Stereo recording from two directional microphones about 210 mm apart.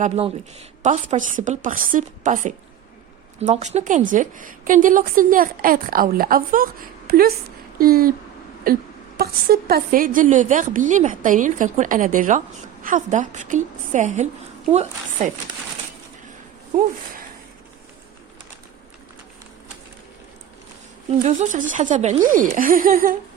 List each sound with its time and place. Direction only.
0.0 s a woman's voice: 30° right (ahead or behind)
21.1 s a woman's voice: 35° right (ahead or behind)